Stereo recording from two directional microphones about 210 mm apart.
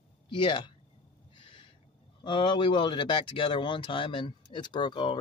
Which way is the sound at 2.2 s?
20° left (ahead or behind).